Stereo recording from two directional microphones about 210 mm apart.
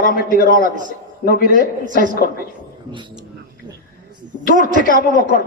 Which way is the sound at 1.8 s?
40° right (ahead or behind).